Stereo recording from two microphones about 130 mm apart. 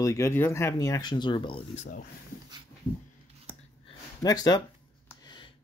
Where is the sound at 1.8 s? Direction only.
90° left.